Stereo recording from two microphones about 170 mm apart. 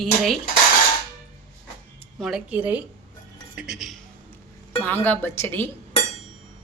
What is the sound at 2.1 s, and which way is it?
A woman's voice, centre (ahead or behind).